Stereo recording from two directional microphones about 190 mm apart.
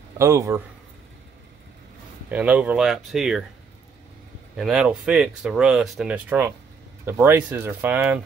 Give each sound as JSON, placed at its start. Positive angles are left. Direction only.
{"t": 0.2, "sound": "speech", "side_deg": -15}
{"t": 2.3, "sound": "speech", "side_deg": -5}
{"t": 4.6, "sound": "speech", "side_deg": -5}